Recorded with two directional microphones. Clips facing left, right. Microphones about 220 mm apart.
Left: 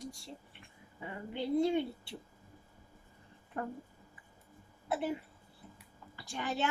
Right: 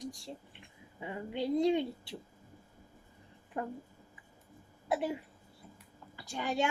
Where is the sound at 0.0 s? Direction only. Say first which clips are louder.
Right 3 dB; 15° right (ahead or behind).